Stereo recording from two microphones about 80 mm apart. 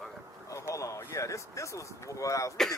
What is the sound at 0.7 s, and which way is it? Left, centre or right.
Speech, left.